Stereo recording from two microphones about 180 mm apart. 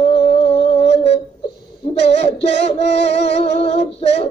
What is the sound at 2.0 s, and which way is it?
Music, 35° left (ahead or behind).